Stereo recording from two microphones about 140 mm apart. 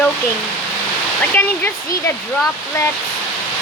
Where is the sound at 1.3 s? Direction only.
15° left (ahead or behind).